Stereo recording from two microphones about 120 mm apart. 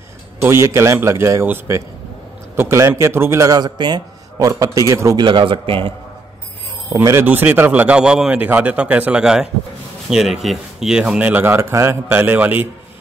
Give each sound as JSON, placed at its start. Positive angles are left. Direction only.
{"t": 0.4, "sound": "a man's voice", "side_deg": -20}
{"t": 5.2, "sound": "a man's voice", "side_deg": -45}
{"t": 6.9, "sound": "a man's voice", "side_deg": -25}